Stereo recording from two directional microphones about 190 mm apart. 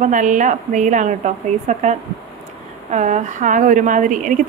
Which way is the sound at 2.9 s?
40° right (ahead or behind).